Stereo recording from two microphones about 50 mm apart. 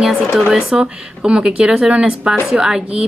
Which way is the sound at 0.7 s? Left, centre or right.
Centre.